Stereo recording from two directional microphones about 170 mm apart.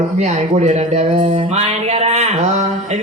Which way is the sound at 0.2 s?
45° right (ahead or behind).